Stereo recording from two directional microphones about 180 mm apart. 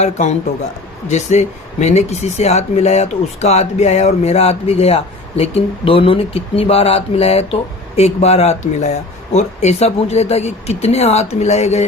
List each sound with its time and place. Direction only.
0.0 s speech: 40° left (ahead or behind)